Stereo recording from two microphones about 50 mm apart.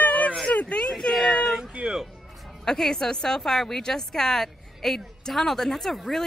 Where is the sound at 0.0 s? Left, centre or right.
Left.